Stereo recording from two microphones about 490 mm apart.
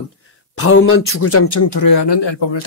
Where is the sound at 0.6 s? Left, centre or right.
Left.